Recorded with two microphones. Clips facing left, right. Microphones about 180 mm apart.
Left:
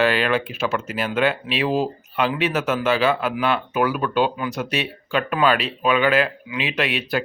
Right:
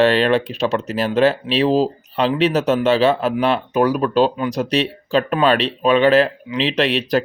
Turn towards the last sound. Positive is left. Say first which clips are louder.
# right 6 dB
turn(degrees=-35)  # may be behind; listen again after turning